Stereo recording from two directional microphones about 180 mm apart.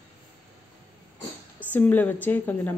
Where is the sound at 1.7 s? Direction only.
10° left (ahead or behind).